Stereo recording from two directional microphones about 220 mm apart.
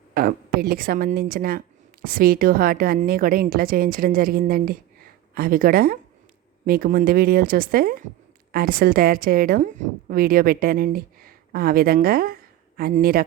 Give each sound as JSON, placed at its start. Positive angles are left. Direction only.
{"t": 0.1, "sound": "a woman's voice", "side_deg": -40}